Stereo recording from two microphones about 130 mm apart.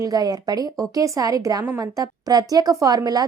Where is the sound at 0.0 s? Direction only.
30° right (ahead or behind).